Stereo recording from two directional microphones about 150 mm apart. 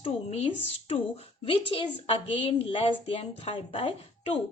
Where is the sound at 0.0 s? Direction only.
45° left (ahead or behind).